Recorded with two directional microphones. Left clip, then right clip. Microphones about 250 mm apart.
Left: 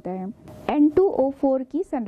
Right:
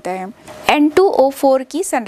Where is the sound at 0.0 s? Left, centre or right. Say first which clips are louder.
Right 9 dB; centre.